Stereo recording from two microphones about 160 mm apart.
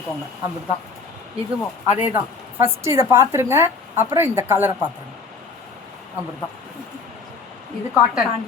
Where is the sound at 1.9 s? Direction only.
10° right (ahead or behind).